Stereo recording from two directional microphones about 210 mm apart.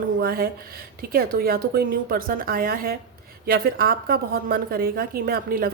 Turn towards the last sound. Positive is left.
turn(degrees=-45)  # may be behind; listen again after turning